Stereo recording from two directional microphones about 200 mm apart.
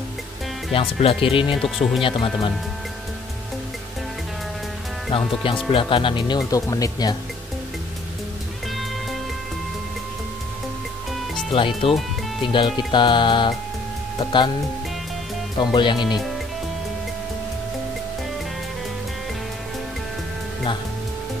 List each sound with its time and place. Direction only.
0.7 s speech: 25° left (ahead or behind)
5.1 s speech: 25° left (ahead or behind)
11.5 s speech: 25° left (ahead or behind)
15.5 s speech: 20° left (ahead or behind)